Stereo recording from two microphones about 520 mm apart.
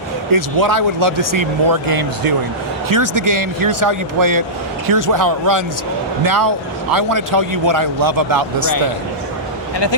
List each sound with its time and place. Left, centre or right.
0.3 s speech: right